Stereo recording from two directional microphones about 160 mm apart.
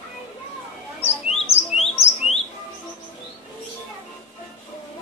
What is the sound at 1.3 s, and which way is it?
Chirp, 40° left (ahead or behind).